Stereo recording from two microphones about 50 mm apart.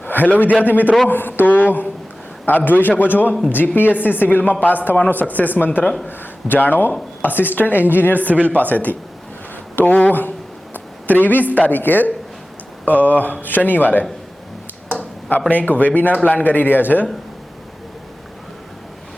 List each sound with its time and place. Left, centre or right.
0.0 s a man's voice: left
15.4 s a woman's voice: left